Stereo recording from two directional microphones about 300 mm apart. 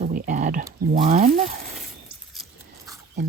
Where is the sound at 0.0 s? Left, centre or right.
Right.